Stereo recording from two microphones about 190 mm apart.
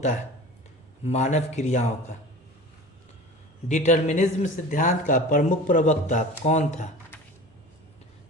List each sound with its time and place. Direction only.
1.0 s speech: 35° left (ahead or behind)
3.7 s speech: 40° left (ahead or behind)